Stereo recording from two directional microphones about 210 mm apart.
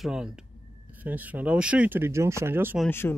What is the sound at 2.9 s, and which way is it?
Speech, 10° left (ahead or behind).